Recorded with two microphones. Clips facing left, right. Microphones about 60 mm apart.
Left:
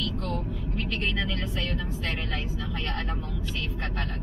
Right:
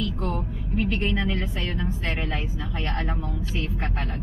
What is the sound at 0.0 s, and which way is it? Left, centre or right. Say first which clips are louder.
Speech: right 3 dB; centre.